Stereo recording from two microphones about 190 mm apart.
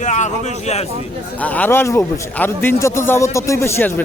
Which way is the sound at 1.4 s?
10° left (ahead or behind).